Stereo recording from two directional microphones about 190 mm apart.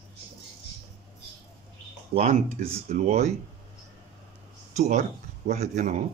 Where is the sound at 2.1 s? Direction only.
35° right (ahead or behind).